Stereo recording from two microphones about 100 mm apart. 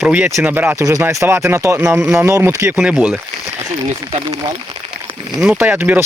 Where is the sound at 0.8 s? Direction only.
30° right (ahead or behind).